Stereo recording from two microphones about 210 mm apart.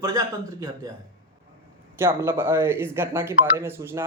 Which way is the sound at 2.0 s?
10° right (ahead or behind).